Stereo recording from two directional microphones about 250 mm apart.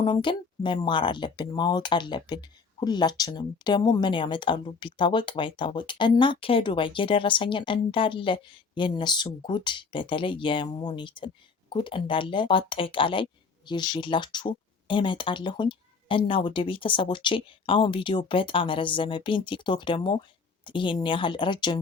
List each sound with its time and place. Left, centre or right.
0.0 s speech: centre